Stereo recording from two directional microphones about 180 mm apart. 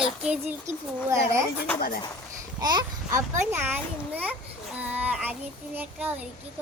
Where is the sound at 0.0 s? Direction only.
5° right (ahead or behind).